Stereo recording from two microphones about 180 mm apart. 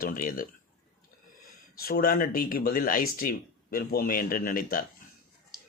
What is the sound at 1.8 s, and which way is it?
Speech, 55° left (ahead or behind).